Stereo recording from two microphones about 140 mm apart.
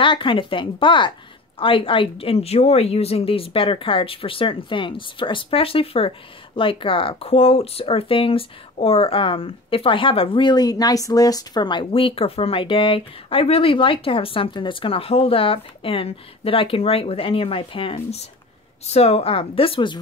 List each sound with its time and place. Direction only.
0.0 s a woman's voice: 35° left (ahead or behind)